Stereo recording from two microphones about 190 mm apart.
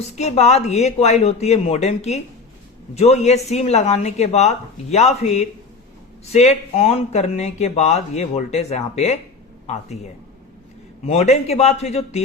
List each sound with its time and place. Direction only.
0.2 s speech: 35° left (ahead or behind)